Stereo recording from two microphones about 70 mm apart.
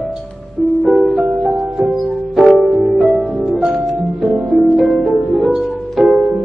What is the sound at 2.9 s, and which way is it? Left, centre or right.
Music, centre.